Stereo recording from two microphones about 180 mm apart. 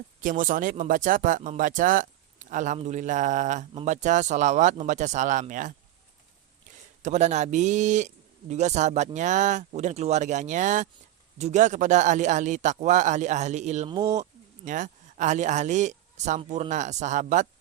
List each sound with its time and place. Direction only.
0.2 s speech: 45° right (ahead or behind)
7.0 s a man's voice: 40° right (ahead or behind)